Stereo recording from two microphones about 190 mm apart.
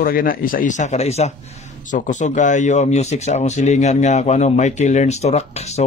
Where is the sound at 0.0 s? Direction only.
50° left (ahead or behind).